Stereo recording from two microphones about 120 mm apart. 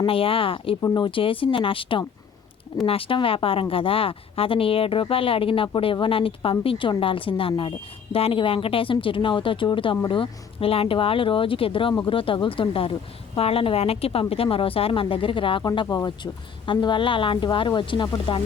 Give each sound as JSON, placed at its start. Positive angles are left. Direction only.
{"t": 0.0, "sound": "a woman's voice", "side_deg": 50}